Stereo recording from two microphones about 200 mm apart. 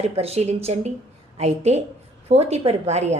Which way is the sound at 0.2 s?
30° right (ahead or behind).